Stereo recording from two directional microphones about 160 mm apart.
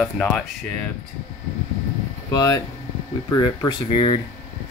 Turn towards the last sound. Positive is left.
turn(degrees=30)  # may be behind; listen again after turning